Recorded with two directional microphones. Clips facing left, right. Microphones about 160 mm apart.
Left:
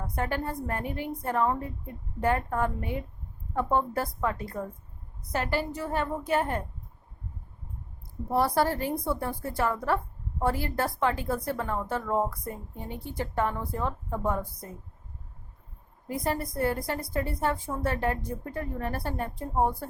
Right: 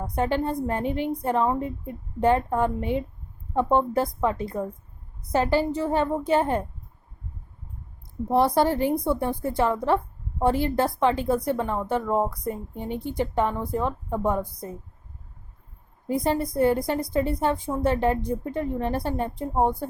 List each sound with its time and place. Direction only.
0.2 s a woman's voice: 25° right (ahead or behind)
8.3 s a woman's voice: 20° right (ahead or behind)
16.0 s a woman's voice: 20° right (ahead or behind)